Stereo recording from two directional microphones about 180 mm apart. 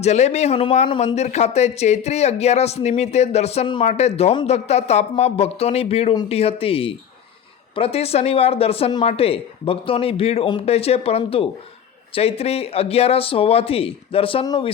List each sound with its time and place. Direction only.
0.0 s speech: 40° left (ahead or behind)